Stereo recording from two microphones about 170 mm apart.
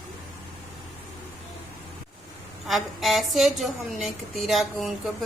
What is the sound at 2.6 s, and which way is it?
Speech, centre (ahead or behind).